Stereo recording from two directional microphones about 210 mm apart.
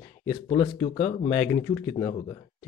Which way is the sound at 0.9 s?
30° left (ahead or behind).